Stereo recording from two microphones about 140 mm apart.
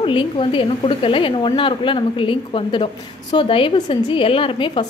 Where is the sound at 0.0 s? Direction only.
40° left (ahead or behind).